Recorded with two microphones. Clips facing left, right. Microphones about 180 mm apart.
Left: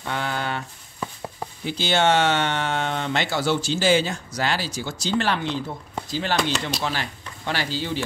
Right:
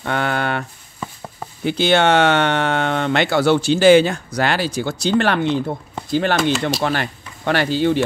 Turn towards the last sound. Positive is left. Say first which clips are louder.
# right 10 dB
turn(degrees=-60)  # may be behind; listen again after turning